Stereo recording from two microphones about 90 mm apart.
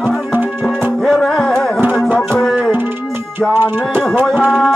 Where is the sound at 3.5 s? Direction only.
20° right (ahead or behind).